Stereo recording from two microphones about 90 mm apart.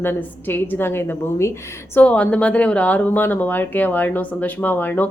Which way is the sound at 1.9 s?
15° left (ahead or behind).